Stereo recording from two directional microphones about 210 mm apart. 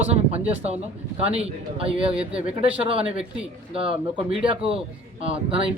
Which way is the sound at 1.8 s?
25° right (ahead or behind).